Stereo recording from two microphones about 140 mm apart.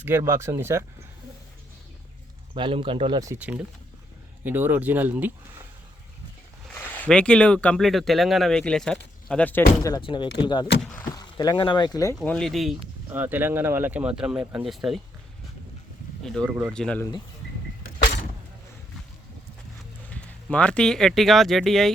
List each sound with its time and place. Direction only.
0.0 s speech: 15° right (ahead or behind)
2.6 s speech: 40° right (ahead or behind)
3.3 s speech: 10° right (ahead or behind)
6.7 s speech: 10° left (ahead or behind)
10.0 s speech: 35° left (ahead or behind)
12.1 s speech: 5° left (ahead or behind)
13.1 s speech: 15° right (ahead or behind)
16.2 s speech: 5° left (ahead or behind)
20.1 s speech: 10° left (ahead or behind)